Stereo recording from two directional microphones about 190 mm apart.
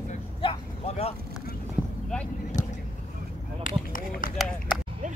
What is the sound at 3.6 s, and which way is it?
Speech, 45° left (ahead or behind).